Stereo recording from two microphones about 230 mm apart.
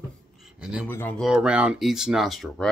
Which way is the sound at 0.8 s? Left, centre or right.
Centre.